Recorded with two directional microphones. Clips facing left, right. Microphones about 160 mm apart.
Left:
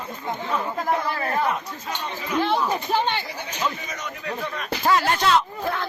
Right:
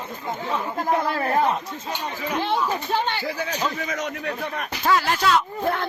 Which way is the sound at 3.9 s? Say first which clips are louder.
Right 4 dB; 75° right (ahead or behind).